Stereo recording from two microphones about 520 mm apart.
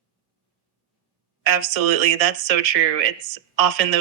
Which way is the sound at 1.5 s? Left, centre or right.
Right.